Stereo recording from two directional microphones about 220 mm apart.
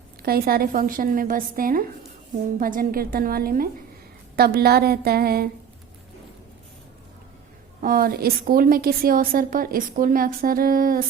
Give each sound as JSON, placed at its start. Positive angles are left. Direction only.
{"t": 0.2, "sound": "a woman's voice", "side_deg": -45}
{"t": 7.8, "sound": "a woman's voice", "side_deg": -40}